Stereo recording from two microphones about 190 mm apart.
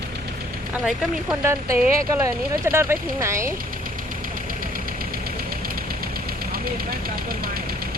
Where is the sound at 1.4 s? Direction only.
15° right (ahead or behind).